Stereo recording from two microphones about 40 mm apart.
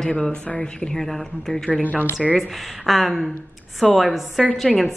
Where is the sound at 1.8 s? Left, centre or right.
Left.